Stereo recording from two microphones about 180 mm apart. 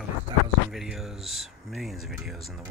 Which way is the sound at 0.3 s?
30° right (ahead or behind).